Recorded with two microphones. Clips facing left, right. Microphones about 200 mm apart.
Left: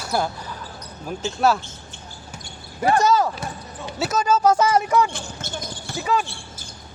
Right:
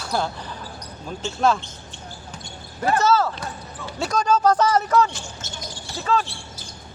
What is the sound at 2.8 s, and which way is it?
Speech, 15° left (ahead or behind).